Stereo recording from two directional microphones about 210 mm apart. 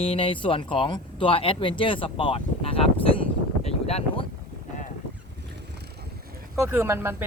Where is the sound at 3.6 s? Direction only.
30° left (ahead or behind).